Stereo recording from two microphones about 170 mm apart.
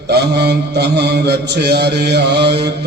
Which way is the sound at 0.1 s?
75° right (ahead or behind).